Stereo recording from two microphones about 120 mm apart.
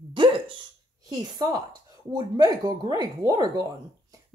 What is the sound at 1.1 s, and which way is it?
Speech, 35° right (ahead or behind).